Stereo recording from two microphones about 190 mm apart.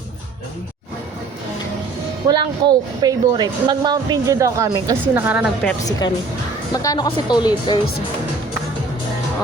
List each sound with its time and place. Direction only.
2.2 s speech: 20° right (ahead or behind)
6.8 s speech: 20° left (ahead or behind)